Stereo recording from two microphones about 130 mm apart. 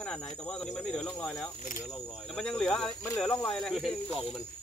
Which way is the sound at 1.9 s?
5° left (ahead or behind).